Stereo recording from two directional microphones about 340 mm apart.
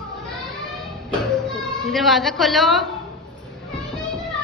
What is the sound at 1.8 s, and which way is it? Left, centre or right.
Speech, centre.